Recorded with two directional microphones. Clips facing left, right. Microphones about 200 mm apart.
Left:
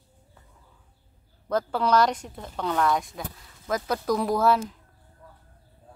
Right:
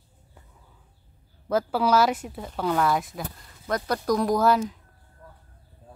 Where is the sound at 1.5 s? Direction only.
5° right (ahead or behind).